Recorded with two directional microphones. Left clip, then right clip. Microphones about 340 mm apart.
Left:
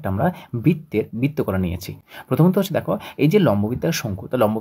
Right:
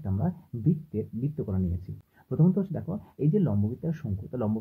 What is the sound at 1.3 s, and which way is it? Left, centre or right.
Speech, left.